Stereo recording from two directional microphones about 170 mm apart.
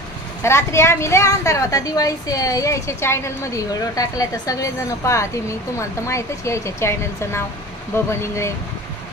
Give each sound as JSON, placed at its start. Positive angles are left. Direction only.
{"t": 0.4, "sound": "a woman's voice", "side_deg": 15}